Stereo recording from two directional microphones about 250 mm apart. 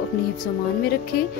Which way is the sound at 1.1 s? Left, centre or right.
Left.